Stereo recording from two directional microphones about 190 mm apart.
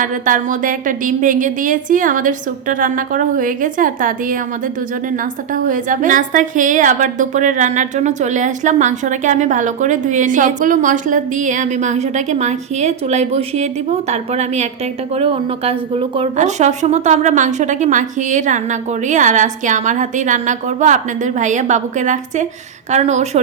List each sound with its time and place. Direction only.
0.0 s a woman's voice: 45° right (ahead or behind)